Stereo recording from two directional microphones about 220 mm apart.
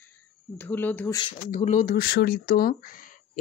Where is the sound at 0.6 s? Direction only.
10° left (ahead or behind).